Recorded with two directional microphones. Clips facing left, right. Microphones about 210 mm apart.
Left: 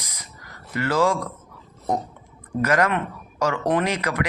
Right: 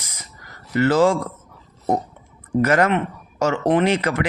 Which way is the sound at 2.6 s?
30° right (ahead or behind).